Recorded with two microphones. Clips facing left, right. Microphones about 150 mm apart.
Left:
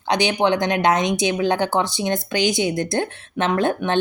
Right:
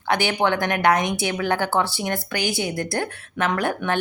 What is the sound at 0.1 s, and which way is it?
Speech, 20° left (ahead or behind).